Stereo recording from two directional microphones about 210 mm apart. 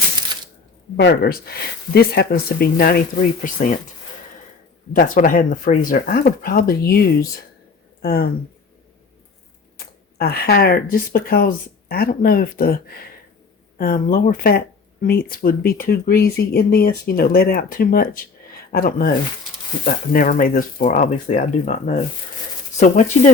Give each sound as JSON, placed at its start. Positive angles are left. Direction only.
{"t": 0.9, "sound": "speech", "side_deg": 50}
{"t": 4.9, "sound": "speech", "side_deg": 40}
{"t": 8.0, "sound": "speech", "side_deg": 45}
{"t": 9.7, "sound": "speech", "side_deg": 45}